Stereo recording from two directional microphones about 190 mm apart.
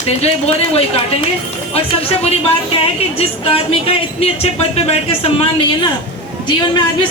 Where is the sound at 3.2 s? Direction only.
30° left (ahead or behind).